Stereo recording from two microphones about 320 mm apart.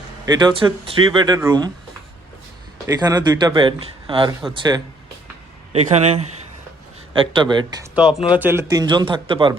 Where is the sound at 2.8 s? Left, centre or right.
Centre.